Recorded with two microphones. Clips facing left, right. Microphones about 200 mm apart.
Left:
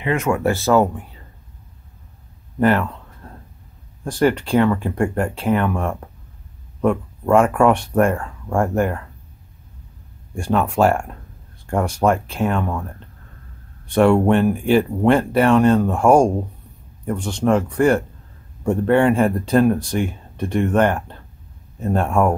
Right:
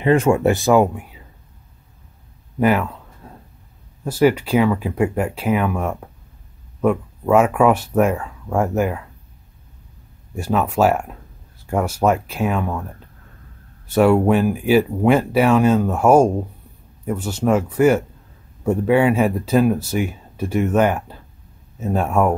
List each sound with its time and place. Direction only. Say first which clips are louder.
0.0 s speech: right 4 dB; 30° right (ahead or behind); by 1.2 s 10° right (ahead or behind)
2.6 s a sound: even; 5° right (ahead or behind)
4.0 s speech: right 2 dB; 5° right (ahead or behind)
10.3 s speech: even; 5° right (ahead or behind)